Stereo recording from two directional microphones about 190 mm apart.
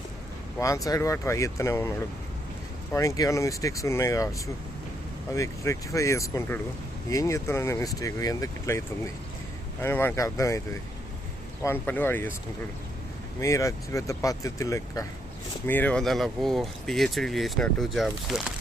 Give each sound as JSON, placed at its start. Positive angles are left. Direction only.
{"t": 0.6, "sound": "speech", "side_deg": 15}
{"t": 2.9, "sound": "speech", "side_deg": 15}
{"t": 5.3, "sound": "speech", "side_deg": 15}
{"t": 9.8, "sound": "speech", "side_deg": 10}
{"t": 11.6, "sound": "speech", "side_deg": 10}
{"t": 13.4, "sound": "speech", "side_deg": 15}